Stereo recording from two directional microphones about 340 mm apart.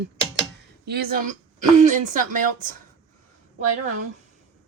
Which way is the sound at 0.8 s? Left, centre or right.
Right.